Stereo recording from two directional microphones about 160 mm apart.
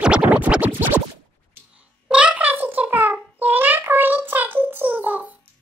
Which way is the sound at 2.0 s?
10° right (ahead or behind).